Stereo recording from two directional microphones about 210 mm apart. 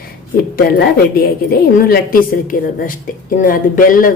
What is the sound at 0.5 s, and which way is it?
A woman's voice, 45° left (ahead or behind).